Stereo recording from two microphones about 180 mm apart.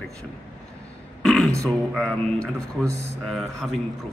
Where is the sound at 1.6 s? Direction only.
5° left (ahead or behind).